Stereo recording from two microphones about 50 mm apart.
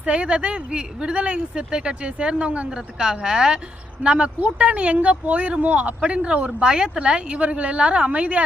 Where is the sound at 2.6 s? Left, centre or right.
Centre.